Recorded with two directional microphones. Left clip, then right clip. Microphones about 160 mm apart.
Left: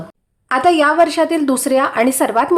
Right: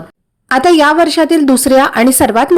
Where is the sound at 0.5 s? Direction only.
30° right (ahead or behind).